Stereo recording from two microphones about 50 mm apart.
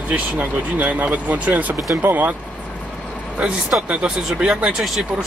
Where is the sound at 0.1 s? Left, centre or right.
Right.